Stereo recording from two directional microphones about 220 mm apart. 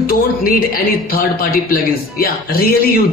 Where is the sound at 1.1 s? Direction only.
40° left (ahead or behind).